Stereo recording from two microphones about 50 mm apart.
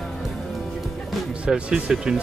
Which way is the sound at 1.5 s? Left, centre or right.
Right.